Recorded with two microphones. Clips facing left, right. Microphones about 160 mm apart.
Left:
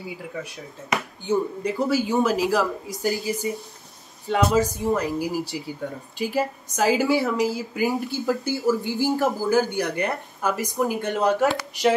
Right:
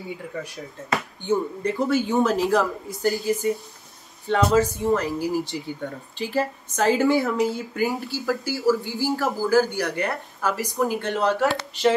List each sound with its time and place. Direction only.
1.2 s a man's voice: centre (ahead or behind)
7.8 s speech: 20° left (ahead or behind)